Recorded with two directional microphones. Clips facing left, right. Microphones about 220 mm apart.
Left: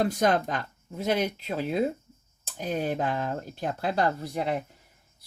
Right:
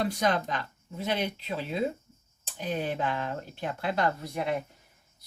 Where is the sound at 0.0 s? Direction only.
50° left (ahead or behind).